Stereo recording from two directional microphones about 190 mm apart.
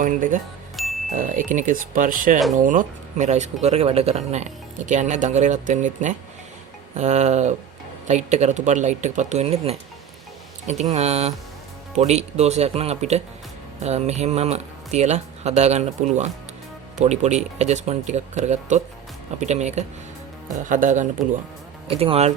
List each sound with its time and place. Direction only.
0.0 s speech: 45° right (ahead or behind)
0.8 s music: centre (ahead or behind)
1.3 s speech: 45° right (ahead or behind)
21.8 s speech: 30° right (ahead or behind)